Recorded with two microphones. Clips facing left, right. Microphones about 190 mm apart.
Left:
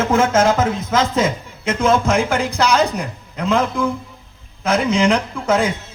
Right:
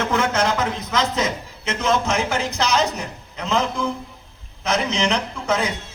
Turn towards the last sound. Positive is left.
turn(degrees=50)  # may be behind; listen again after turning